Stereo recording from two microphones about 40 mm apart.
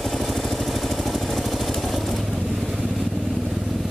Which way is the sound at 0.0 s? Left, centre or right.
Centre.